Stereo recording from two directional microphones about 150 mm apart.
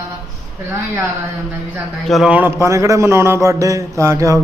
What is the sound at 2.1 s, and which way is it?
A man's voice, centre (ahead or behind).